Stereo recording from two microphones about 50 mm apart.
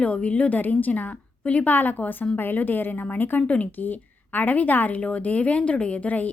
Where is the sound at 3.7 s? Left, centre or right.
Left.